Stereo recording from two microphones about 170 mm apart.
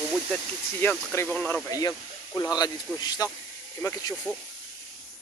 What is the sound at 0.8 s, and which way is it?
Speech, 10° left (ahead or behind).